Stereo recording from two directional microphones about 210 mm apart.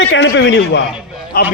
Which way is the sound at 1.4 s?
45° left (ahead or behind).